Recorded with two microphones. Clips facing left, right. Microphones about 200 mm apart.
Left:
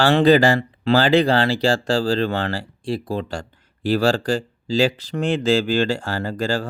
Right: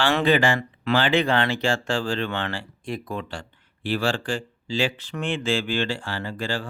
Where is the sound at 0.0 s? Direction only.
35° left (ahead or behind).